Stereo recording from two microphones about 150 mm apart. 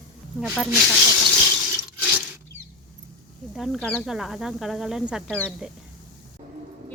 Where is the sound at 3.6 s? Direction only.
10° left (ahead or behind).